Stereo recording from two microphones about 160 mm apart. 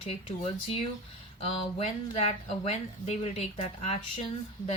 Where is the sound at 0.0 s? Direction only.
40° left (ahead or behind).